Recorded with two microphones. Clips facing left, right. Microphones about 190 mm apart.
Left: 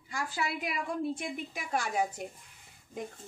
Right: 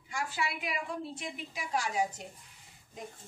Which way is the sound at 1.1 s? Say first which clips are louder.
Left 5 dB; 50° left (ahead or behind).